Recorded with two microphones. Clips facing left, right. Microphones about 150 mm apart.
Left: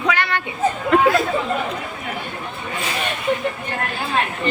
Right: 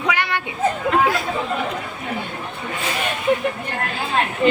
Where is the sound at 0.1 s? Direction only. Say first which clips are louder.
Even; 15° right (ahead or behind).